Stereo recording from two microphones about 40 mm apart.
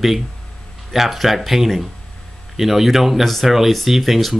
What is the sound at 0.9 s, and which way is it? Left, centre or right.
Speech, centre.